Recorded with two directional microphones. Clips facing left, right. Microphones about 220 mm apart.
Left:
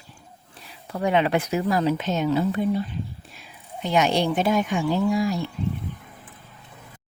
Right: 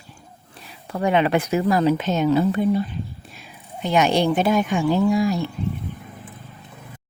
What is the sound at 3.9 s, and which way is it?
Speech, 60° right (ahead or behind).